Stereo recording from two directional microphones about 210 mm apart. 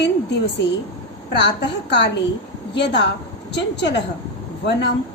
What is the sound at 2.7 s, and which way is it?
A woman's voice, 55° left (ahead or behind).